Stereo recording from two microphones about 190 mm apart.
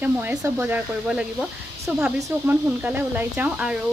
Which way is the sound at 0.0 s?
10° right (ahead or behind).